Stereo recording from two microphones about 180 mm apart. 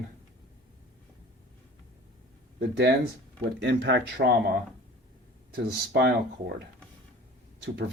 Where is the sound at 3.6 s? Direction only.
70° right (ahead or behind).